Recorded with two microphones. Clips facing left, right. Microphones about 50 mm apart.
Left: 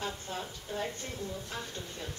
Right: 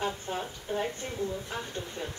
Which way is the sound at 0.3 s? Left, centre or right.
Right.